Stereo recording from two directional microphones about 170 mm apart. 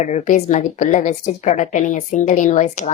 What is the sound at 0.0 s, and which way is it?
A woman's voice, 45° left (ahead or behind).